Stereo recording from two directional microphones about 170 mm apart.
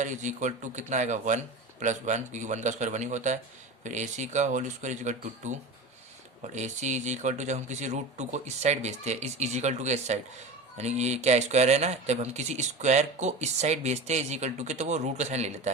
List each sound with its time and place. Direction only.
0.0 s speech: 45° right (ahead or behind)